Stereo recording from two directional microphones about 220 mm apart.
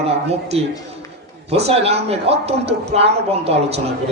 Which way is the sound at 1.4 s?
30° right (ahead or behind).